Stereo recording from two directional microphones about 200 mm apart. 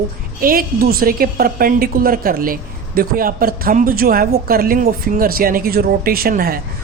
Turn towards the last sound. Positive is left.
turn(degrees=-45)  # may be behind; listen again after turning